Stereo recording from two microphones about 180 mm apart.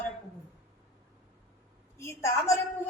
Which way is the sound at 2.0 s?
15° left (ahead or behind).